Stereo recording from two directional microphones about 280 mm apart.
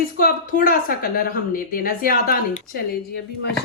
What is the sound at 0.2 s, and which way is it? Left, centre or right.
A woman's voice, left.